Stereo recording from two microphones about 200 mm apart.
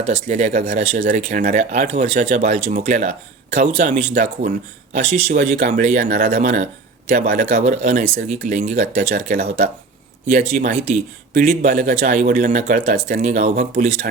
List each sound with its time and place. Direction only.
0.1 s speech: 35° right (ahead or behind)